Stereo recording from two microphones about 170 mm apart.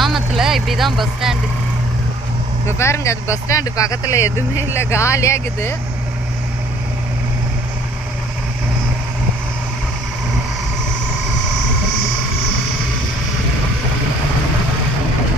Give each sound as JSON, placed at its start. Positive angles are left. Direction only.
{"t": 0.0, "sound": "vehicle", "side_deg": 0}
{"t": 2.8, "sound": "speech", "side_deg": 15}